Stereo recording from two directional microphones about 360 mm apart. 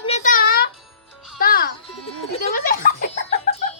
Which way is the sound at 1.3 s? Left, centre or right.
Left.